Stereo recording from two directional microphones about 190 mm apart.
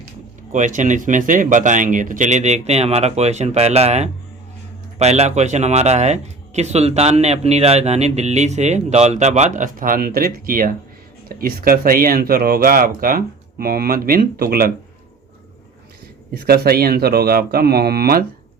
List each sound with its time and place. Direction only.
0.5 s speech: 40° right (ahead or behind)
16.3 s speech: 55° right (ahead or behind)